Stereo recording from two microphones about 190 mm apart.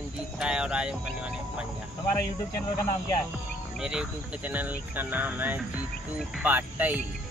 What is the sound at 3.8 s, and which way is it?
Speech, 5° right (ahead or behind).